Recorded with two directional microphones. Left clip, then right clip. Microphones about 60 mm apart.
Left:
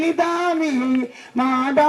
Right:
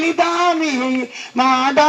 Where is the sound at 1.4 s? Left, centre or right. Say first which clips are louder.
Right 5 dB; left.